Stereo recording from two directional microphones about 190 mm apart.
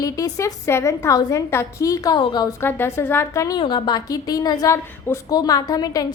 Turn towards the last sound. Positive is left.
turn(degrees=20)  # may be behind; listen again after turning